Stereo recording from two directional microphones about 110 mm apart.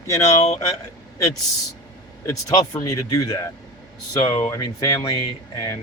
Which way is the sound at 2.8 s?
30° left (ahead or behind).